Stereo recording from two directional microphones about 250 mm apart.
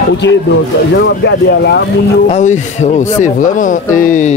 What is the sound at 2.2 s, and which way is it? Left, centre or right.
Speech, left.